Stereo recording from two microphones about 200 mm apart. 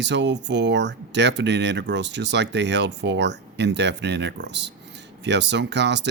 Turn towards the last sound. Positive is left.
turn(degrees=-60)  # may be behind; listen again after turning